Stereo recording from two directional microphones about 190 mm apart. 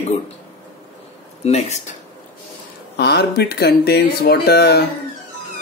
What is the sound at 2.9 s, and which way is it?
Speech, 60° left (ahead or behind).